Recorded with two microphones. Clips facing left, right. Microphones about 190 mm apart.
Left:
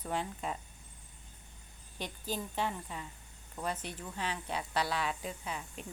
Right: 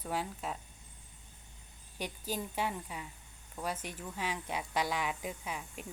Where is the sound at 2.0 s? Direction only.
10° right (ahead or behind).